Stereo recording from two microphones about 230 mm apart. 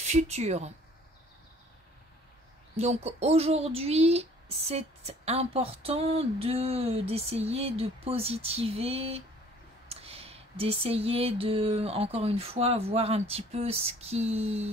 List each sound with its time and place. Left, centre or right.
0.0 s speech: right
2.7 s speech: right